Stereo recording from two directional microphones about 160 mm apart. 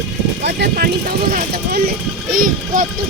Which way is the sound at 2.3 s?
60° right (ahead or behind).